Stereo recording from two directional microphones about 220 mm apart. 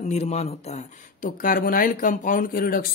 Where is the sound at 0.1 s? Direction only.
30° left (ahead or behind).